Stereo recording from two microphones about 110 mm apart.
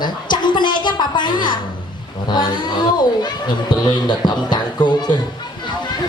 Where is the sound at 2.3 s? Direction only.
40° left (ahead or behind).